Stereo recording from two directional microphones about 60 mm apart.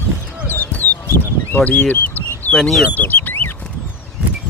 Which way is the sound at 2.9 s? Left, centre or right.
Left.